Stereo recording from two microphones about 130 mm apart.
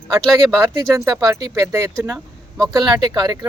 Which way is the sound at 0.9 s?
25° right (ahead or behind).